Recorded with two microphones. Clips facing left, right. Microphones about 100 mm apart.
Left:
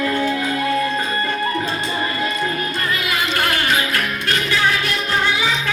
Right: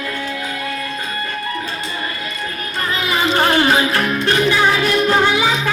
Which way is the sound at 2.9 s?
30° right (ahead or behind).